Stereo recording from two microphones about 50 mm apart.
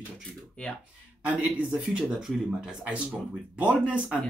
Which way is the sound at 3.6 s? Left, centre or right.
Right.